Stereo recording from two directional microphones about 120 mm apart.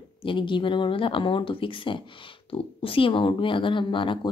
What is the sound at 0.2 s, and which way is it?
Speech, 45° left (ahead or behind).